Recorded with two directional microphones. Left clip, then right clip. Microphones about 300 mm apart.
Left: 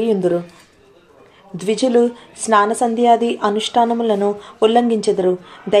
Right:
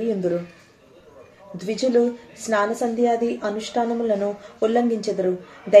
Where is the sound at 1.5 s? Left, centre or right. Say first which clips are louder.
Left 5 dB; left.